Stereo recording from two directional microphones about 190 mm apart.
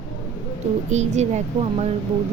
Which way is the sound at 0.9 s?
35° right (ahead or behind).